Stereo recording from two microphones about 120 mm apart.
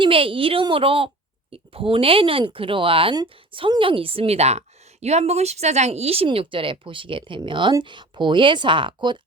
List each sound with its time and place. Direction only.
0.0 s a woman's voice: 50° right (ahead or behind)